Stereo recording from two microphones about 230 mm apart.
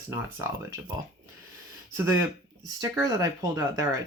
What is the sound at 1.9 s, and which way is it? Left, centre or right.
Speech, centre.